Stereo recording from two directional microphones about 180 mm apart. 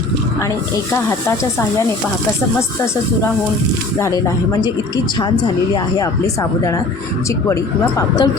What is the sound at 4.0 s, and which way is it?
Speech, 15° left (ahead or behind).